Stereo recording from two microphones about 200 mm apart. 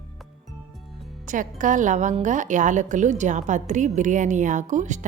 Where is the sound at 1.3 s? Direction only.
40° right (ahead or behind).